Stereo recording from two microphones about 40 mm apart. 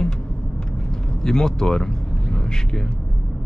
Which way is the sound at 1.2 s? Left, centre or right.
Centre.